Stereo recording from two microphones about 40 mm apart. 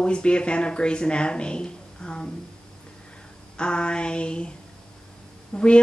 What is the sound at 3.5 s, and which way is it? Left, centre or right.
Speech, left.